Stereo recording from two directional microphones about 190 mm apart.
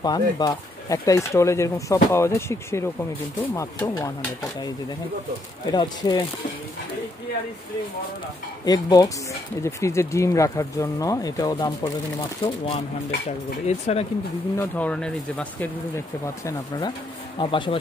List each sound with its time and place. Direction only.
0.0 s speech: 20° left (ahead or behind)
5.7 s speech: 20° left (ahead or behind)
8.6 s speech: 20° left (ahead or behind)
14.6 s speech: 5° left (ahead or behind)
16.4 s speech: 20° left (ahead or behind)